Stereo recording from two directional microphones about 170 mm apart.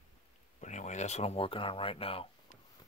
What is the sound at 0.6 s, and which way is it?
Speech, 45° left (ahead or behind).